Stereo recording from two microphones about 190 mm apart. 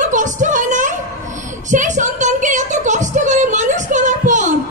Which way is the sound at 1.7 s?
40° right (ahead or behind).